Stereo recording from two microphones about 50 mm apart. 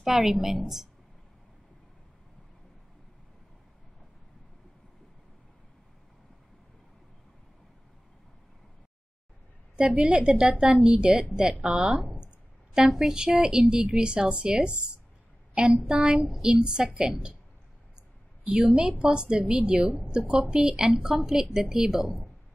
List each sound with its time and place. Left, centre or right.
0.0 s a woman's voice: centre
9.8 s a woman's voice: right
18.4 s a woman's voice: right; by 22.3 s centre